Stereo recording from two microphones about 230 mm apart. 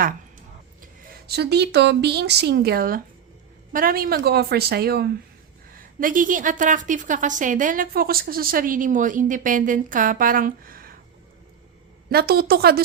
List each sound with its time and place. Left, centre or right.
1.3 s a woman's voice: right
12.1 s a woman's voice: right